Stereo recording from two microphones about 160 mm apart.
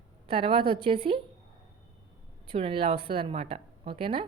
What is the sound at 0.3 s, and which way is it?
Speech, 35° right (ahead or behind).